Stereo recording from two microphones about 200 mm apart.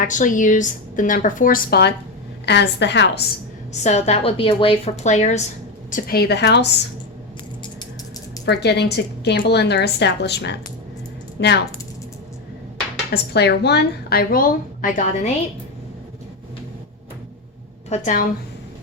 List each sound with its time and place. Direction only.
0.0 s a woman's voice: 40° left (ahead or behind); by 3.1 s 60° left (ahead or behind)
3.7 s a woman's voice: 35° left (ahead or behind)
5.9 s a woman's voice: 50° left (ahead or behind)
8.4 s a woman's voice: 55° left (ahead or behind)
13.1 s a woman's voice: 55° left (ahead or behind)
17.8 s a woman's voice: 35° left (ahead or behind)